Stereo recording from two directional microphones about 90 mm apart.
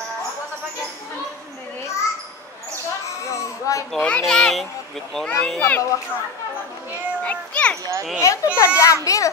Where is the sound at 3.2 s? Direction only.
35° left (ahead or behind).